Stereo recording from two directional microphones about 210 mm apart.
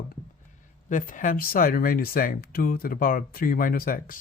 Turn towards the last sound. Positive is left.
turn(degrees=40)  # may be behind; listen again after turning